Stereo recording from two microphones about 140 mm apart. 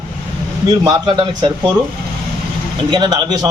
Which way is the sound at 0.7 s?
30° right (ahead or behind).